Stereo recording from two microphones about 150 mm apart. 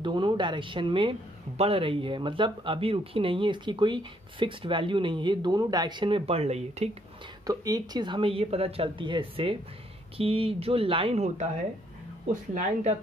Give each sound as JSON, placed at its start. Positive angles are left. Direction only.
{"t": 0.0, "sound": "speech", "side_deg": -30}
{"t": 7.4, "sound": "speech", "side_deg": -25}